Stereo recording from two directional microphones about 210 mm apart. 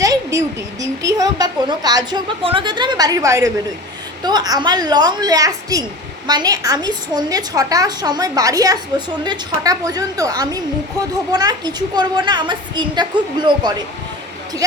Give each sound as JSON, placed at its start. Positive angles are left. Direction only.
{"t": 0.0, "sound": "a woman's voice", "side_deg": -15}